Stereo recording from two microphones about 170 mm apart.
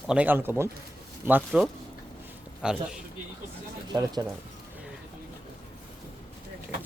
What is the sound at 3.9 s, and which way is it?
Speech, 25° right (ahead or behind).